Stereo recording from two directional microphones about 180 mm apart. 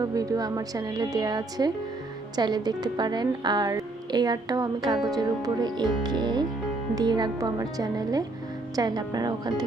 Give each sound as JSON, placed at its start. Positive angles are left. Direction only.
{"t": 0.0, "sound": "a woman's voice", "side_deg": -20}